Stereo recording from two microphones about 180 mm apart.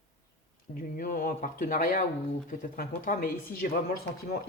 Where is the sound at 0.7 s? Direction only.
50° left (ahead or behind).